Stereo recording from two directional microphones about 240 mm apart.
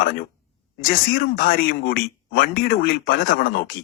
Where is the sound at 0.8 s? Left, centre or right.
Left.